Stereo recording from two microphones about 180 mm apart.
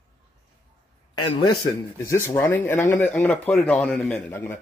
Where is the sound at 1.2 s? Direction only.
30° left (ahead or behind).